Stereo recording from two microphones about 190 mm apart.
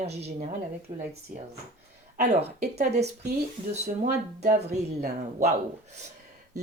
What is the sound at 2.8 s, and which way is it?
Speech, 35° right (ahead or behind).